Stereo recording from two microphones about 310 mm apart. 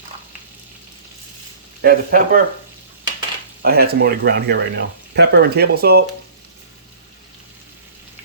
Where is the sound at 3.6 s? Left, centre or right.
Right.